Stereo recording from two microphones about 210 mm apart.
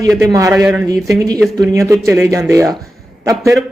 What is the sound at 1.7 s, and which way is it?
Speech, 15° right (ahead or behind).